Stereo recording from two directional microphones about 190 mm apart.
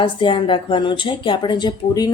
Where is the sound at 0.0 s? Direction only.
25° left (ahead or behind).